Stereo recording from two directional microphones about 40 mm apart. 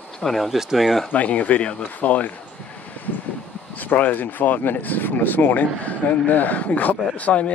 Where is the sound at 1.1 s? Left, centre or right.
Left.